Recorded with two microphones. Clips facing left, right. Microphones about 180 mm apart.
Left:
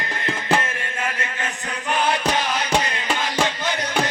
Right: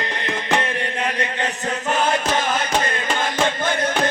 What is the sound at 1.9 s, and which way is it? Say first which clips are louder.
Music: right 1 dB; 45° right (ahead or behind).